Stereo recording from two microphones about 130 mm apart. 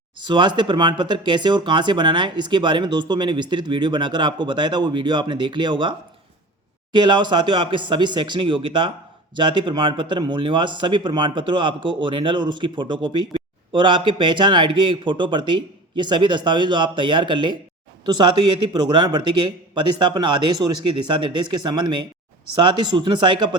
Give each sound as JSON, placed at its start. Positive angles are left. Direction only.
{"t": 0.3, "sound": "speech", "side_deg": -35}
{"t": 6.9, "sound": "speech", "side_deg": -35}